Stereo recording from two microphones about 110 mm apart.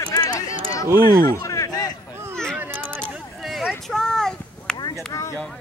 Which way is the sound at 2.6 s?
20° right (ahead or behind).